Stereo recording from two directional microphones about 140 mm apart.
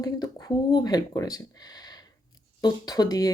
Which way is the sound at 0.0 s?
25° left (ahead or behind).